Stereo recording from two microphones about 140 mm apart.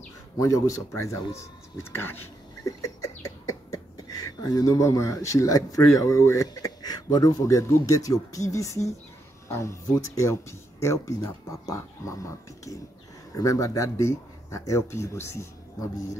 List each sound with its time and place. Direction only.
0.4 s speech: 25° left (ahead or behind)
2.6 s a sound: 25° left (ahead or behind)
9.5 s speech: 20° left (ahead or behind)